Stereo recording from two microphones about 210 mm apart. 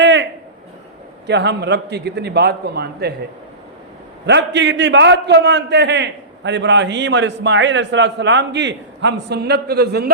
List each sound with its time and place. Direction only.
0.0 s a sound: 60° right (ahead or behind)
1.3 s a man's voice: 55° right (ahead or behind)
4.3 s a man's voice: 55° right (ahead or behind)